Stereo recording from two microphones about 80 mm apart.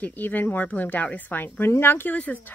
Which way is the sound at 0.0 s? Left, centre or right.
Left.